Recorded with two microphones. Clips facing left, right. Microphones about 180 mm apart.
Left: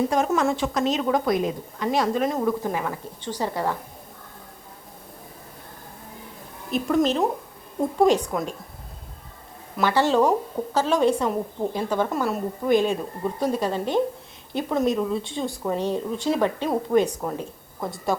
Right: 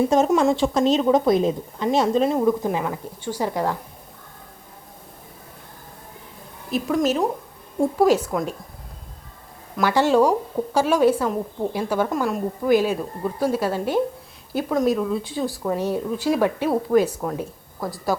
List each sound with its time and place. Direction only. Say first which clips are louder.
0.1 s a woman's voice: right 4 dB; 25° right (ahead or behind)
2.4 s a woman's voice: right 4 dB; 15° right (ahead or behind)
6.7 s speech: even; centre (ahead or behind)
9.8 s a woman's voice: right 2 dB; 15° right (ahead or behind)